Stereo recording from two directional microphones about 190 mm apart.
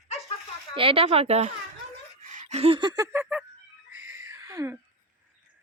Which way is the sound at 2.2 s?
40° right (ahead or behind).